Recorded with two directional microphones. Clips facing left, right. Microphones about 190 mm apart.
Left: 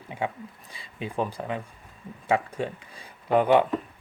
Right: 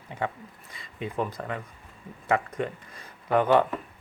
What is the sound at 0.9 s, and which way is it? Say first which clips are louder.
Speech: even; 25° left (ahead or behind).